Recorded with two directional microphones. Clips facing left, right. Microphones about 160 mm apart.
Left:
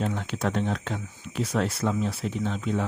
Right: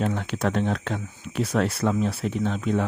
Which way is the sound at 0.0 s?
60° right (ahead or behind).